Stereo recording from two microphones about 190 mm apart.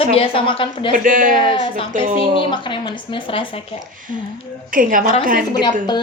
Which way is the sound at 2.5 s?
25° left (ahead or behind).